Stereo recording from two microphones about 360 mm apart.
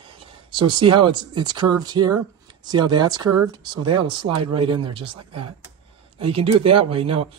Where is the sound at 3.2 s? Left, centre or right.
Right.